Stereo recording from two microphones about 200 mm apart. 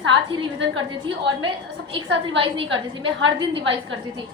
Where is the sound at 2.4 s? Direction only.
25° right (ahead or behind).